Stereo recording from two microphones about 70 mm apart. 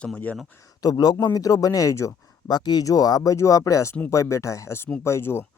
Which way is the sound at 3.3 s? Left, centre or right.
Left.